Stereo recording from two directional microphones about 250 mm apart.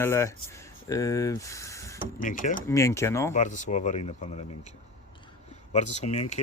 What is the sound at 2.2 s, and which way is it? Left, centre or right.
Speech, left.